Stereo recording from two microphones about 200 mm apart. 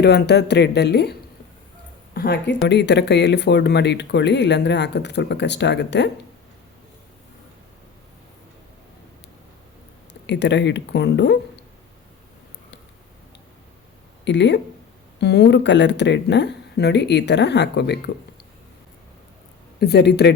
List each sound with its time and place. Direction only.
0.0 s speech: 55° left (ahead or behind)
2.1 s speech: 55° left (ahead or behind)
10.2 s speech: 60° left (ahead or behind)
14.3 s speech: 60° left (ahead or behind)
19.8 s speech: 55° left (ahead or behind)